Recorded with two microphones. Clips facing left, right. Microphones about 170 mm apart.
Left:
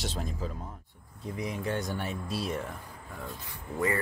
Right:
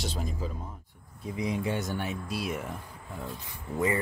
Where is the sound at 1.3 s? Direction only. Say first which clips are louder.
Right 3 dB; 15° right (ahead or behind).